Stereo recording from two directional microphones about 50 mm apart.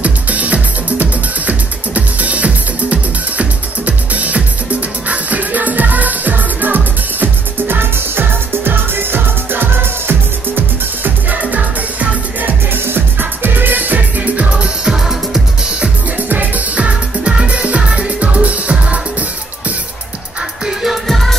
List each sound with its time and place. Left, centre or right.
0.0 s music: right
11.2 s music: right
12.8 s music: right
14.9 s music: centre
16.3 s music: right
20.6 s music: centre